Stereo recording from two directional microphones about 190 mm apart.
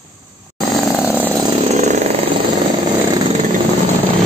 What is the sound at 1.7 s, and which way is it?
Chainsaw, 35° right (ahead or behind).